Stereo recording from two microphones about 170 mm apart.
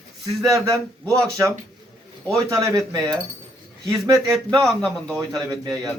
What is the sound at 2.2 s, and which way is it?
A man's voice, 20° right (ahead or behind).